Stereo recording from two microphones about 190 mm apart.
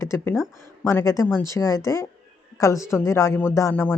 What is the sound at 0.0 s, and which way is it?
Speech, 15° left (ahead or behind).